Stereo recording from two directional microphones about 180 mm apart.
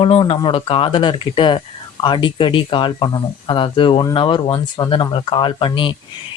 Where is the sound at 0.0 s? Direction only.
35° left (ahead or behind).